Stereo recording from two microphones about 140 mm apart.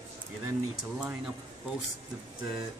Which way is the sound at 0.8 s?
Centre (ahead or behind).